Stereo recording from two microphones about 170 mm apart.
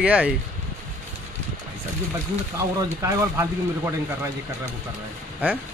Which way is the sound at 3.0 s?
15° right (ahead or behind).